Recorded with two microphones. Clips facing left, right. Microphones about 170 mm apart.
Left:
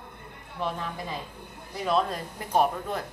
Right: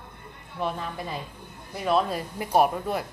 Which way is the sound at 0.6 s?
5° right (ahead or behind).